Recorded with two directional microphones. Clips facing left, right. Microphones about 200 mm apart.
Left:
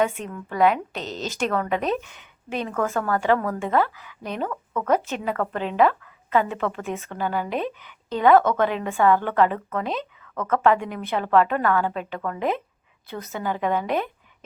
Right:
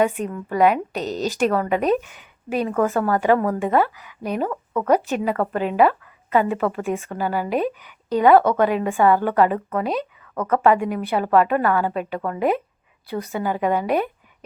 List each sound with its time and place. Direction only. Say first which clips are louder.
0.1 s a woman's voice: right 7 dB; centre (ahead or behind)
0.4 s a woman's voice: right 2 dB; 15° right (ahead or behind)
0.9 s a woman's voice: right 6 dB; 40° right (ahead or behind)
1.4 s a woman's voice: right 4 dB; 10° right (ahead or behind)